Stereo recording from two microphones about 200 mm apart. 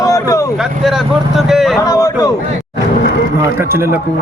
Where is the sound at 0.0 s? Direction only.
15° left (ahead or behind).